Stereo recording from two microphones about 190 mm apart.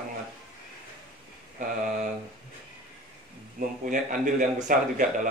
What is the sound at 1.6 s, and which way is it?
Speech, 40° right (ahead or behind).